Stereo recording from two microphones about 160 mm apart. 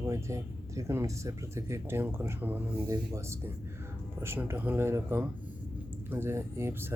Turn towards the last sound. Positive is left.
turn(degrees=-15)  # may be behind; listen again after turning